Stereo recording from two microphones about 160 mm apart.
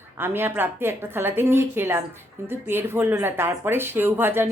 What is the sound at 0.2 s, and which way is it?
A woman's voice, 15° right (ahead or behind).